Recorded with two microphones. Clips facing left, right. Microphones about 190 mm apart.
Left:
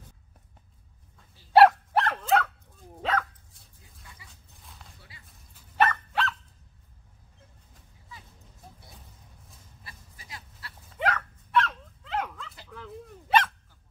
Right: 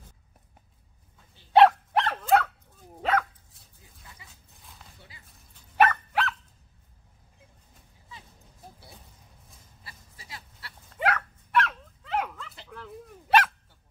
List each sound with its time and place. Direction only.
1.5 s dog: 5° left (ahead or behind)
2.0 s dog: 10° right (ahead or behind)
4.3 s a sound: centre (ahead or behind)
5.2 s dog: 5° left (ahead or behind)
5.8 s dog: 10° right (ahead or behind)
9.8 s goat: 30° right (ahead or behind)
10.9 s dog: 5° right (ahead or behind)